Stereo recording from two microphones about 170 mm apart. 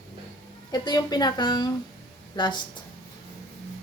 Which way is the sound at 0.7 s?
25° left (ahead or behind).